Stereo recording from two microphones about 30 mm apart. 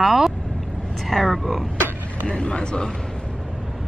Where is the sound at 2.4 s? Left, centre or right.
Left.